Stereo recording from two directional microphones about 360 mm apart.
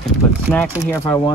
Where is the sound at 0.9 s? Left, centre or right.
Centre.